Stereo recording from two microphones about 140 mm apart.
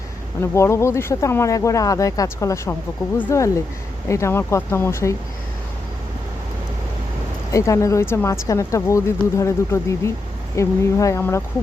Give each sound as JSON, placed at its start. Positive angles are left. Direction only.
{"t": 0.3, "sound": "speech", "side_deg": 20}
{"t": 7.5, "sound": "speech", "side_deg": 20}